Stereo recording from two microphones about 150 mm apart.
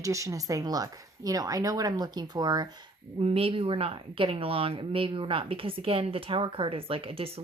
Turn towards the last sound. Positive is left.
turn(degrees=-40)  # may be behind; listen again after turning